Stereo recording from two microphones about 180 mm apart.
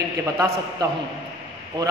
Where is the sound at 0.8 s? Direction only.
25° right (ahead or behind).